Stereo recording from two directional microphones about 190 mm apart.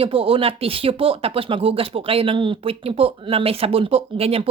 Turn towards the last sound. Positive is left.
turn(degrees=-30)  # may be behind; listen again after turning